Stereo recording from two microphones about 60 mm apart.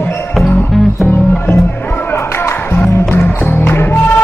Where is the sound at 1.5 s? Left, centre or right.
Left.